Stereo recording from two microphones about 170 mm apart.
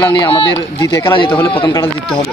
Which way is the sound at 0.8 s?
20° left (ahead or behind).